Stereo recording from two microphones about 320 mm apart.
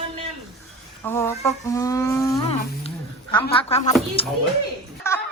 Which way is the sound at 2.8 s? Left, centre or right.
Centre.